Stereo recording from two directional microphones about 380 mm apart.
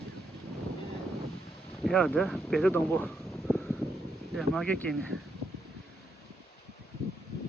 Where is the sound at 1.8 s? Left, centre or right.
Centre.